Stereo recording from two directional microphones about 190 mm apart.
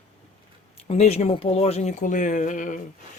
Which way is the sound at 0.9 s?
35° left (ahead or behind).